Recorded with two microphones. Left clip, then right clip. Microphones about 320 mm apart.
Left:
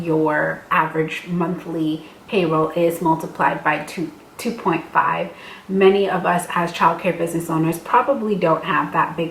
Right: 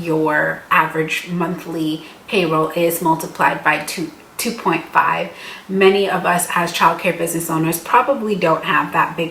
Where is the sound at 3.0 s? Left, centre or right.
Centre.